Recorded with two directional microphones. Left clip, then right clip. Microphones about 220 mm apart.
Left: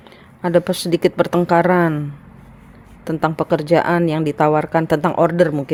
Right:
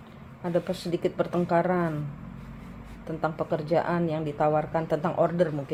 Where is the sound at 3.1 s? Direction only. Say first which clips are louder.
Left 10 dB; 55° left (ahead or behind).